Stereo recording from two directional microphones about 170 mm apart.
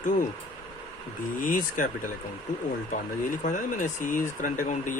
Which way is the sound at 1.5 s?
50° left (ahead or behind).